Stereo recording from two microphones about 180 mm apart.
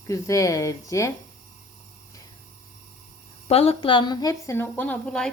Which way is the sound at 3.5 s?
35° left (ahead or behind).